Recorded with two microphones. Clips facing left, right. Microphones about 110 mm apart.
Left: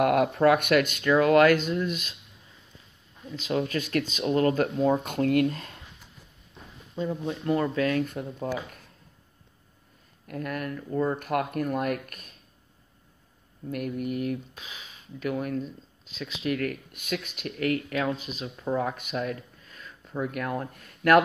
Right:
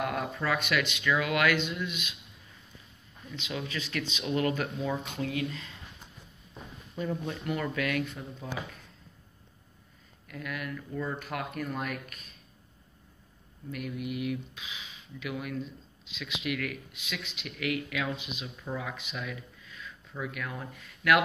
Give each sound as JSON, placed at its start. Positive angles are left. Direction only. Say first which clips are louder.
{"t": 0.0, "sound": "speech", "louder": "left 11 dB", "side_deg": 60}
{"t": 3.3, "sound": "speech", "louder": "left 9 dB", "side_deg": 40}
{"t": 7.0, "sound": "speech", "louder": "left 3 dB", "side_deg": 15}
{"t": 7.4, "sound": "speech", "louder": "left 7 dB", "side_deg": 30}
{"t": 8.1, "sound": "speech", "louder": "left 8 dB", "side_deg": 50}
{"t": 10.2, "sound": "speech", "louder": "left 6 dB", "side_deg": 45}
{"t": 13.7, "sound": "speech", "louder": "left 5 dB", "side_deg": 45}